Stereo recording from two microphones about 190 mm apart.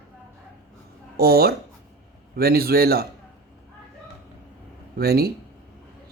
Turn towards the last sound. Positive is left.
turn(degrees=-55)  # may be behind; listen again after turning